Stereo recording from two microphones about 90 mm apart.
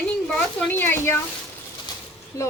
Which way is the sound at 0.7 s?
25° left (ahead or behind).